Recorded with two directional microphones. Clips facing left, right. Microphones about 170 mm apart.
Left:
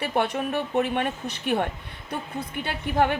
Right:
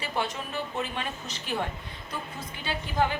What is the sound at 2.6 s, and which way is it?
Speech, 60° left (ahead or behind).